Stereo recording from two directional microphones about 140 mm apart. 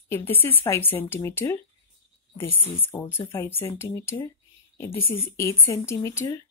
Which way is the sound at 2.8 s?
15° left (ahead or behind).